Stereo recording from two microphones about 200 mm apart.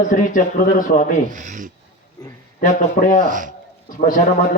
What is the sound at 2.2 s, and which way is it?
Speech, 20° left (ahead or behind).